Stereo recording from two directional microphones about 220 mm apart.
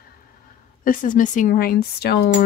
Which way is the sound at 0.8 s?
35° left (ahead or behind).